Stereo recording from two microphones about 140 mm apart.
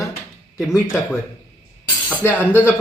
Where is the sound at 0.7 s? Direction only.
20° left (ahead or behind).